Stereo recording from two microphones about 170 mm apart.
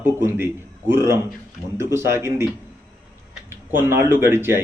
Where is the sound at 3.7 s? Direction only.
15° right (ahead or behind).